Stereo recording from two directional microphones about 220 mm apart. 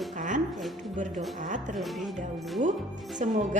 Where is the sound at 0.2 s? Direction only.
35° right (ahead or behind).